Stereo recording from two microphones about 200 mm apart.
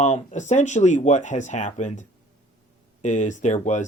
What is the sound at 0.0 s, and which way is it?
Speech, 35° left (ahead or behind).